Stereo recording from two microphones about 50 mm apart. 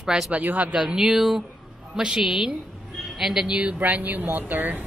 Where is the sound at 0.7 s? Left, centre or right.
Centre.